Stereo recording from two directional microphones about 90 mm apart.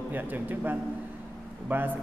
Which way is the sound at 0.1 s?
20° right (ahead or behind).